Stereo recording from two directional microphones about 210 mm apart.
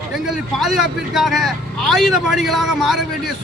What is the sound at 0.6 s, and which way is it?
A man's voice, centre (ahead or behind).